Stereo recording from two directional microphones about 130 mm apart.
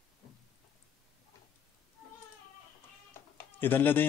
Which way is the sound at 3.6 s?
15° left (ahead or behind).